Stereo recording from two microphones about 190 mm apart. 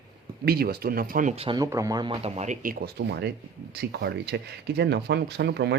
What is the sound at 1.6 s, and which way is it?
Speech, 15° right (ahead or behind).